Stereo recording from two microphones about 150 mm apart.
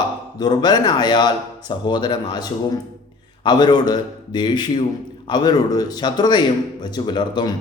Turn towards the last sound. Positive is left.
turn(degrees=30)  # may be behind; listen again after turning